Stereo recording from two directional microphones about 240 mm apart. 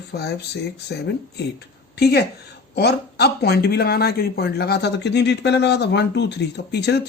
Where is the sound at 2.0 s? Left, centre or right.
Left.